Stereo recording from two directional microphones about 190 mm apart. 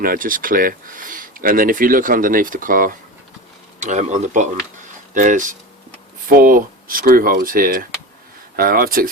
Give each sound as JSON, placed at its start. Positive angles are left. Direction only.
{"t": 0.0, "sound": "speech", "side_deg": -45}